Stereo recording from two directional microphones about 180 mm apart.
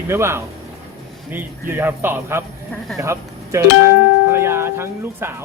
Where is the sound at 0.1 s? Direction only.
15° right (ahead or behind).